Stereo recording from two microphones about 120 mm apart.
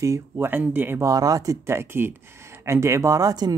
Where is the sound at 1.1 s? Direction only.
30° right (ahead or behind).